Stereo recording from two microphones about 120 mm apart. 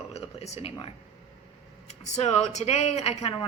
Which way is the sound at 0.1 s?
60° left (ahead or behind).